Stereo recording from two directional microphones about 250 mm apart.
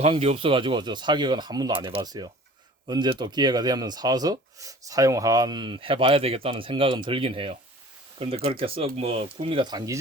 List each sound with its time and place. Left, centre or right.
0.0 s speech: right